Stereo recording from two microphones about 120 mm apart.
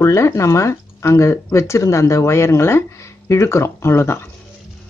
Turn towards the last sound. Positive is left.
turn(degrees=20)  # may be behind; listen again after turning